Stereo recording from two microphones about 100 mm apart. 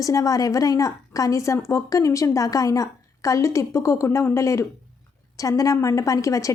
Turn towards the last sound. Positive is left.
turn(degrees=35)  # may be behind; listen again after turning